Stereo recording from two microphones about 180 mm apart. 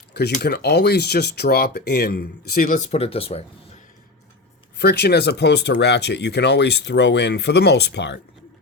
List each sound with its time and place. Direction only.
0.1 s a sound: 65° left (ahead or behind)
0.4 s speech: 65° left (ahead or behind); by 3.4 s 35° left (ahead or behind)
4.8 s speech: 65° left (ahead or behind)